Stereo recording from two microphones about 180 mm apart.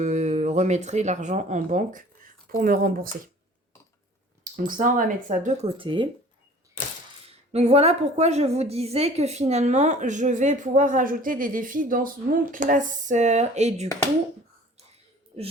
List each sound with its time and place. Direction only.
0.0 s speech: 40° right (ahead or behind)
4.7 s speech: 45° right (ahead or behind)
5.7 s speech: 30° right (ahead or behind)
7.3 s a woman's voice: 35° right (ahead or behind)
15.3 s a woman's voice: 35° right (ahead or behind)